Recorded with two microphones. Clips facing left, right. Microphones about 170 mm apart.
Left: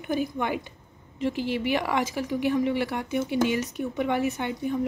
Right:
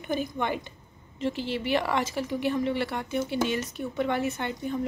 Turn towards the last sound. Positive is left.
turn(degrees=10)  # may be behind; listen again after turning